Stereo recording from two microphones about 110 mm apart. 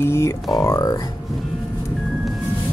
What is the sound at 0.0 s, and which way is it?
Speech, 25° left (ahead or behind).